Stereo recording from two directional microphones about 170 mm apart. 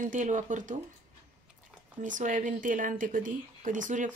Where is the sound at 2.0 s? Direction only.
50° right (ahead or behind).